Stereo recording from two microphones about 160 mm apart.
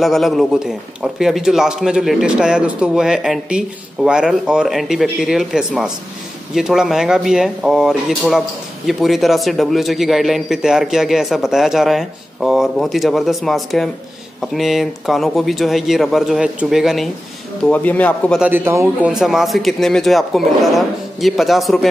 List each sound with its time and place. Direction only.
0.0 s speech: centre (ahead or behind)
17.6 s speech: 10° left (ahead or behind)
18.4 s a man's voice: 15° right (ahead or behind)
19.1 s speech: centre (ahead or behind)